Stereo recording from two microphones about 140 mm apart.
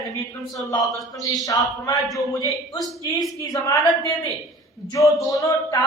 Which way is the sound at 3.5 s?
25° left (ahead or behind).